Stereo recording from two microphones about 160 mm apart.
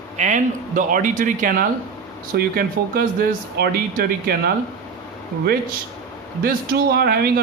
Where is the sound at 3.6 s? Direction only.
80° right.